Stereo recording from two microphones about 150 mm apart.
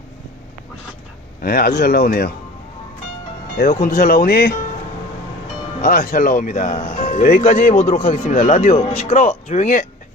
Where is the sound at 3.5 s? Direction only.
70° left (ahead or behind); by 4.5 s 85° left.